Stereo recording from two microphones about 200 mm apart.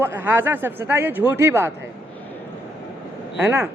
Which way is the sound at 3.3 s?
10° right (ahead or behind).